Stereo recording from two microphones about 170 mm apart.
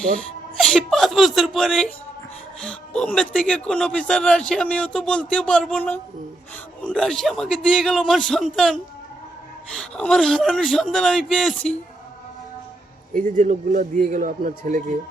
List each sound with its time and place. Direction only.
0.5 s speech: centre (ahead or behind)
13.1 s a man's voice: 50° right (ahead or behind)